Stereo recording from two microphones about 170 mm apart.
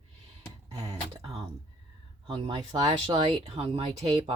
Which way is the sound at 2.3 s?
25° right (ahead or behind).